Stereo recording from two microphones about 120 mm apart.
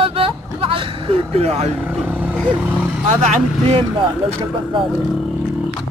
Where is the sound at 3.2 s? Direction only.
70° right (ahead or behind).